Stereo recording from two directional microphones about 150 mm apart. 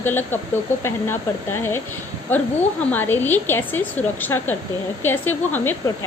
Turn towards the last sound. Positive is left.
turn(degrees=10)  # may be behind; listen again after turning